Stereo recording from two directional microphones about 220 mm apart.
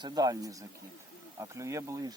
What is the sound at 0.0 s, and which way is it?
Speech, 15° right (ahead or behind).